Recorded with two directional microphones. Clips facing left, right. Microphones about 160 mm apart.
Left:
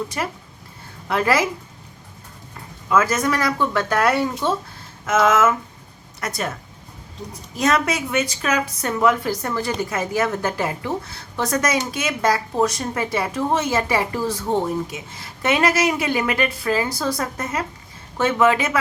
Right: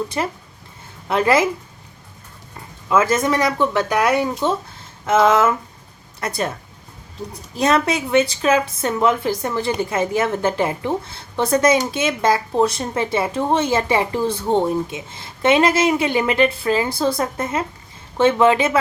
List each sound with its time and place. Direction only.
0.2 s a woman's voice: 25° right (ahead or behind)
2.9 s a woman's voice: 25° right (ahead or behind)
5.0 s a woman's voice: 30° right (ahead or behind)
7.5 s a woman's voice: 30° right (ahead or behind)